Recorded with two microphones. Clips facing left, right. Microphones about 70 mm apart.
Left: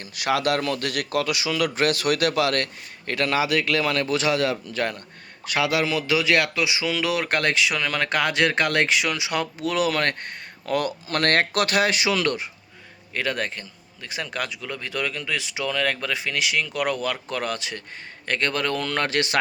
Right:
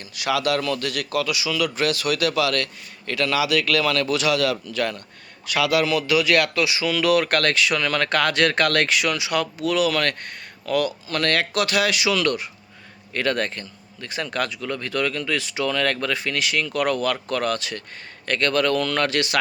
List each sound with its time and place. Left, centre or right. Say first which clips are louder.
0.0 s a man's voice: even; left
13.1 s a man's voice: right 3 dB; centre; by 19.4 s left